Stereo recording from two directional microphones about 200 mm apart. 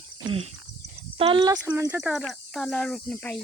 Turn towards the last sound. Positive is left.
turn(degrees=5)  # may be behind; listen again after turning